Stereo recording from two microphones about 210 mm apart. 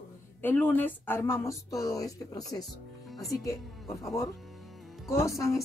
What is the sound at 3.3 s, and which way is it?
Speech, 15° left (ahead or behind).